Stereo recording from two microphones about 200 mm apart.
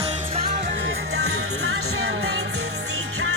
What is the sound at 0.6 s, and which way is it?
Music, 70° right (ahead or behind).